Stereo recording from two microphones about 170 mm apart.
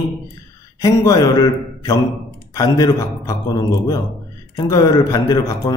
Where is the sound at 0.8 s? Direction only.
20° left (ahead or behind).